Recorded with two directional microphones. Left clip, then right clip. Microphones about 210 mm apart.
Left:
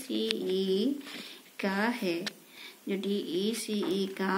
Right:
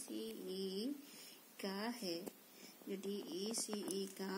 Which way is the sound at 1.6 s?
25° right (ahead or behind).